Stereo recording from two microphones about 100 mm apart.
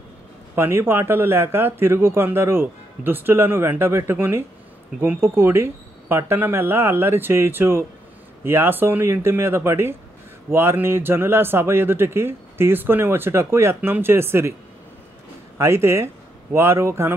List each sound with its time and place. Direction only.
0.6 s speech: 25° right (ahead or behind)
15.5 s speech: 25° right (ahead or behind)